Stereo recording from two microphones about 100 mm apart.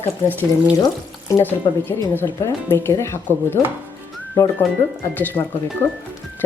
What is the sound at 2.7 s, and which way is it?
Speech, 25° left (ahead or behind).